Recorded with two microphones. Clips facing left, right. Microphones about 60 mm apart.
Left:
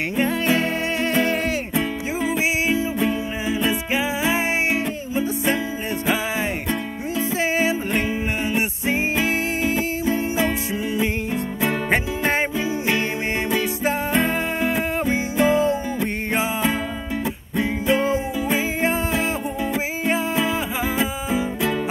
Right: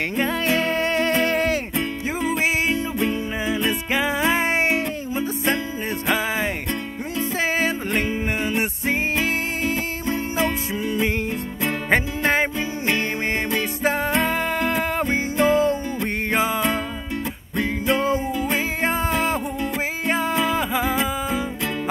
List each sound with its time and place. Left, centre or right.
0.2 s music: right
3.0 s music: centre
3.9 s music: right
7.3 s music: right
8.8 s music: right
11.9 s music: right
15.4 s music: centre
18.8 s music: right
20.1 s music: right
20.9 s music: centre